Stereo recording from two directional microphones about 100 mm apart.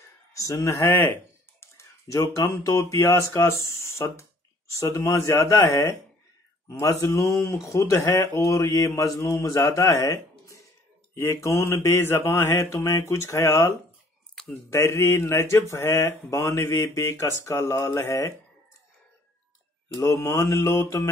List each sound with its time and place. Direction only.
0.0 s a sound: 35° left (ahead or behind)
1.6 s speech: 30° left (ahead or behind)
3.3 s mantra: 30° left (ahead or behind)
4.7 s speech: 35° left (ahead or behind)
5.0 s mantra: 25° left (ahead or behind)
6.7 s speech: 30° left (ahead or behind)
11.1 s mantra: 30° left (ahead or behind)
14.4 s a sound: 5° left (ahead or behind)
14.7 s speech: 30° left (ahead or behind)
19.9 s speech: 35° left (ahead or behind)